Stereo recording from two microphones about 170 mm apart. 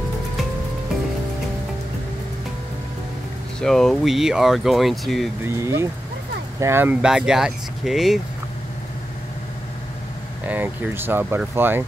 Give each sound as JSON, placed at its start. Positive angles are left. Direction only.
{"t": 3.6, "sound": "speech", "side_deg": 0}
{"t": 5.4, "sound": "speech", "side_deg": -15}
{"t": 10.4, "sound": "speech", "side_deg": -10}